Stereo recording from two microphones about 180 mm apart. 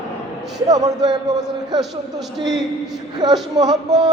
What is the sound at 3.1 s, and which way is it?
Speech, 20° right (ahead or behind).